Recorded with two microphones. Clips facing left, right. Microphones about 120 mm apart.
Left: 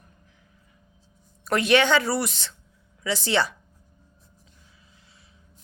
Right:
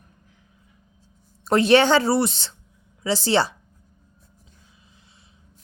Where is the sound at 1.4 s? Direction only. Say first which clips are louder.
Right 4 dB; 30° right (ahead or behind).